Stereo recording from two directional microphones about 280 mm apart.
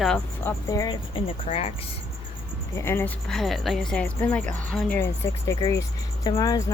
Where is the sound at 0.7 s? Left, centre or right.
Centre.